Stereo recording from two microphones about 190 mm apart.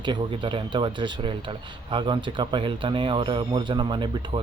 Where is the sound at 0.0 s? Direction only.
25° right (ahead or behind).